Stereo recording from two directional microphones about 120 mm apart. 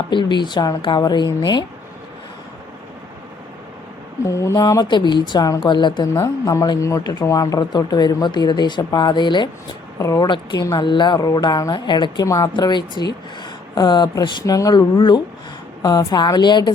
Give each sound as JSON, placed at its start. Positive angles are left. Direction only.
{"t": 0.1, "sound": "speech", "side_deg": 40}
{"t": 4.2, "sound": "speech", "side_deg": 25}
{"t": 6.1, "sound": "speech", "side_deg": 25}
{"t": 10.0, "sound": "speech", "side_deg": 25}
{"t": 10.2, "sound": "speech", "side_deg": 40}
{"t": 12.2, "sound": "speech", "side_deg": 25}
{"t": 12.5, "sound": "speech", "side_deg": 40}